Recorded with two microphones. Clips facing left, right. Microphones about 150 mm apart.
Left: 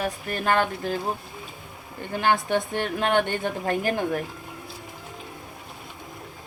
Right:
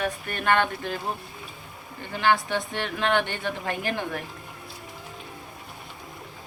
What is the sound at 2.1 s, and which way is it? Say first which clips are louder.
A woman's voice: left 1 dB; 50° left (ahead or behind).